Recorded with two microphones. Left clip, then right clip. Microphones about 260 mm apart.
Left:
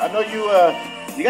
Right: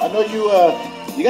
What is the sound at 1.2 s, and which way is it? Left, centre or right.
Music, centre.